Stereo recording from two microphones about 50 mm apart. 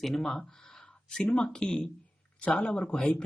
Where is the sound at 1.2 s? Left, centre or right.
Left.